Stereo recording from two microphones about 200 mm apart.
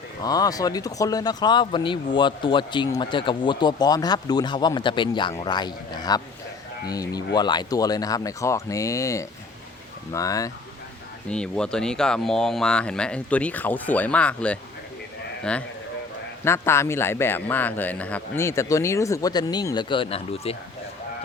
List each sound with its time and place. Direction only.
0.2 s speech: 20° left (ahead or behind)
11.3 s speech: 5° left (ahead or behind); by 20.6 s 30° left (ahead or behind)